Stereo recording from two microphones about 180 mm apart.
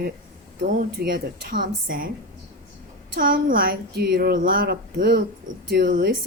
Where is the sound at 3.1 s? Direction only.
50° right (ahead or behind).